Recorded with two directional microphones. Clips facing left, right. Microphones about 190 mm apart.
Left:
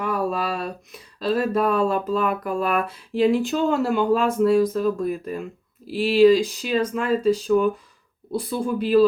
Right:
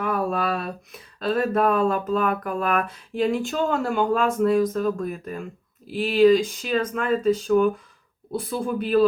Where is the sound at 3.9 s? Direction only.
50° right (ahead or behind).